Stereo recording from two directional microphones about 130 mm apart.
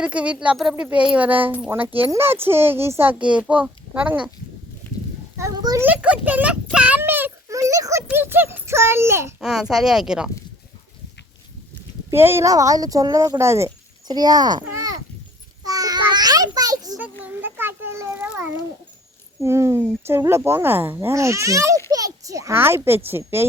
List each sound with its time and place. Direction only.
0.0 s a child's voice: 10° right (ahead or behind)
5.4 s a child's voice: 25° right (ahead or behind)
5.9 s a child's voice: 10° right (ahead or behind)
9.4 s speech: 5° right (ahead or behind)
12.1 s speech: 20° right (ahead or behind)
15.6 s a sound: 30° right (ahead or behind)
17.0 s a child's voice: 15° right (ahead or behind)